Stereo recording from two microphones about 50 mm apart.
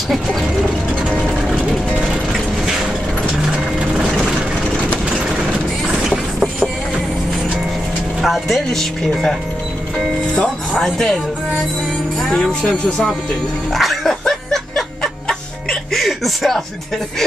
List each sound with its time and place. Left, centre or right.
0.1 s speech: centre
1.2 s vehicle: centre
2.0 s music: centre
8.2 s speech: centre
9.9 s music: centre
10.7 s speech: centre
12.2 s speech: centre
13.7 s dog: centre
15.2 s music: centre